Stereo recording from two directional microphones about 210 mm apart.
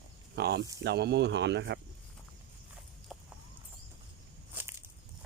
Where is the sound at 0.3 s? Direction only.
50° right (ahead or behind).